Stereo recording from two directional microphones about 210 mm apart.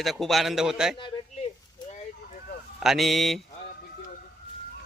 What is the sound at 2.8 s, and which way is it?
Speech, centre (ahead or behind).